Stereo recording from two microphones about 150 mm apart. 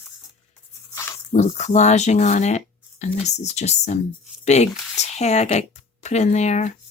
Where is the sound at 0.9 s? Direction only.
15° left (ahead or behind).